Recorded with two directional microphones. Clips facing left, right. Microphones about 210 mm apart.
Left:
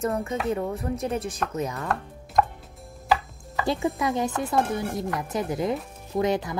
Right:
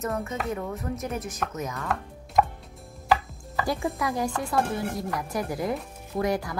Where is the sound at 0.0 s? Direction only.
30° left (ahead or behind).